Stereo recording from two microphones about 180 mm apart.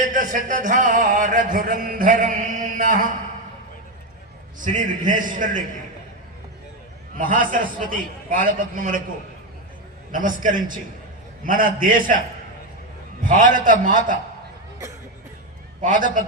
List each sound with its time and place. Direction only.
0.0 s a sound: 45° right (ahead or behind)
4.6 s a man's voice: 45° right (ahead or behind)
7.2 s a man's voice: 50° right (ahead or behind)
10.1 s a man's voice: 50° right (ahead or behind)
13.2 s a man's voice: 45° right (ahead or behind)
15.8 s a man's voice: 45° right (ahead or behind)